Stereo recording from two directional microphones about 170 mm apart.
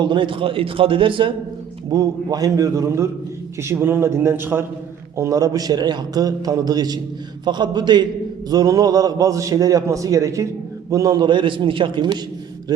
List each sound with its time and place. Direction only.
0.0 s a man's voice: 30° right (ahead or behind)